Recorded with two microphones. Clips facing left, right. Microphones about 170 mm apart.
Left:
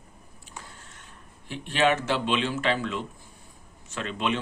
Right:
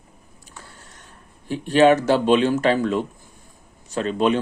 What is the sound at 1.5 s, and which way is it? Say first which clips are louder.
Speech: right 9 dB; 40° right (ahead or behind).